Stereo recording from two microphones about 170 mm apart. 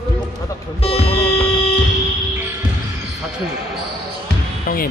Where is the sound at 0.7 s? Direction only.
35° left (ahead or behind).